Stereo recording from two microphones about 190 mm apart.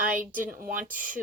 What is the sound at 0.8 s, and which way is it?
Speech, 45° right (ahead or behind).